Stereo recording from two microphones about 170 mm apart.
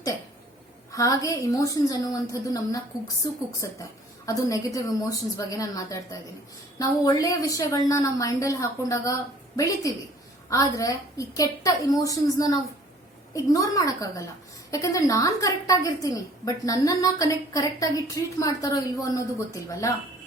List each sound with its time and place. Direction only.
0.9 s a woman's voice: 20° left (ahead or behind)